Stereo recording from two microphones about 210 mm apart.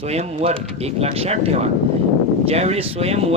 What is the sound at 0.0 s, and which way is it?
Speech, 30° right (ahead or behind).